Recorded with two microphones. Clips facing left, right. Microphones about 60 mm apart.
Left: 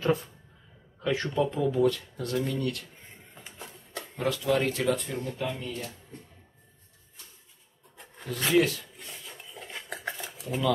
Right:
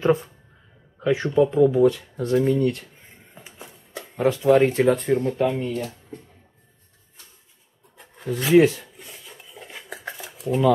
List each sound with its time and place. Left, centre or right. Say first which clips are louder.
0.0 s speech: right 7 dB; right
2.1 s speech: right 10 dB; right
3.3 s a sound: right 2 dB; centre
4.2 s speech: right 10 dB; right
8.5 s speech: right 9 dB; right
9.0 s cutlery: right 1 dB; centre